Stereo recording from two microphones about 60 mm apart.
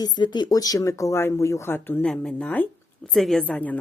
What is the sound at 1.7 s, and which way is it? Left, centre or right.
Speech, left.